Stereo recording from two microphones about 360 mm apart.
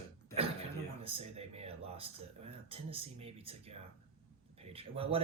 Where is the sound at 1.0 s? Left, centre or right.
Centre.